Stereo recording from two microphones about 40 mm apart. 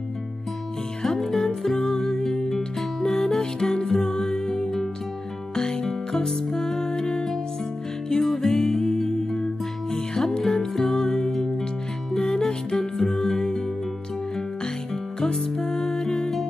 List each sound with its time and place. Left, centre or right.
1.0 s music: centre
15.1 s music: centre